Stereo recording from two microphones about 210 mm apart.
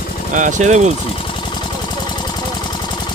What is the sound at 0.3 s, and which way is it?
Speech, 35° right (ahead or behind).